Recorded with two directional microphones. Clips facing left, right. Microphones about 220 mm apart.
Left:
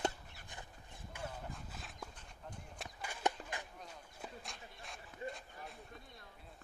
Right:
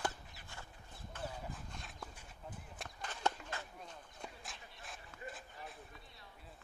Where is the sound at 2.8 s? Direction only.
10° left (ahead or behind).